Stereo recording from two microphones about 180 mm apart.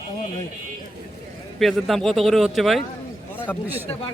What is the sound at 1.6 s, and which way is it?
A man's voice, centre (ahead or behind).